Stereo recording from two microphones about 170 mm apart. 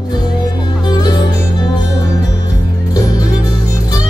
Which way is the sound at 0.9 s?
25° left (ahead or behind).